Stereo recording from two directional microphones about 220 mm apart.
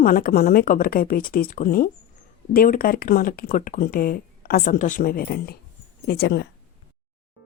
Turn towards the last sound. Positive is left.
turn(degrees=50)  # may be behind; listen again after turning